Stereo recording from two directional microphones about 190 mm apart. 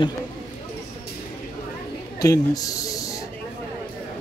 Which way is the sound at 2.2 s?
20° left (ahead or behind).